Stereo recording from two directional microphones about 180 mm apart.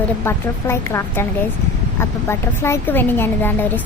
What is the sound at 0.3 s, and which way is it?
Speech, 15° left (ahead or behind).